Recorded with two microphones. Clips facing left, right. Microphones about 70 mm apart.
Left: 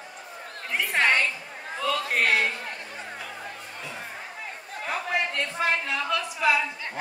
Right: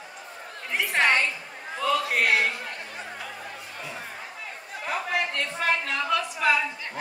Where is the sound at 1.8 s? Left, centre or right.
Centre.